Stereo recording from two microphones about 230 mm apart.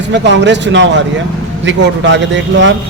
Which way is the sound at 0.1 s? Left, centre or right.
Right.